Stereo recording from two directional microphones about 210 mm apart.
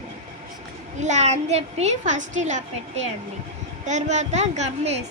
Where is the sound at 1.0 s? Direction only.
35° right (ahead or behind).